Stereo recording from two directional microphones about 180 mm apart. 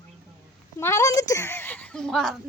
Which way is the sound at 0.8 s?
15° left (ahead or behind).